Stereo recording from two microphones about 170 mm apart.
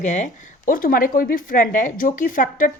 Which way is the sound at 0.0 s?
45° left (ahead or behind).